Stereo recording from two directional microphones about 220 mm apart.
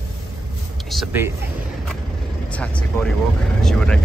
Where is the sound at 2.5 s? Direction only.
5° left (ahead or behind).